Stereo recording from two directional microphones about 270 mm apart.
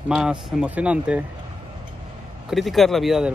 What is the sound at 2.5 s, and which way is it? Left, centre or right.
Speech, centre.